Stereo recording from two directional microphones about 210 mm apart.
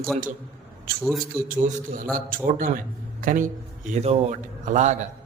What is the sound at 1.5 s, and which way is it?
A man's voice, 40° right (ahead or behind).